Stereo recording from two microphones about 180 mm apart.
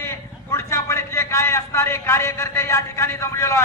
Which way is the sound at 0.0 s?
15° left (ahead or behind).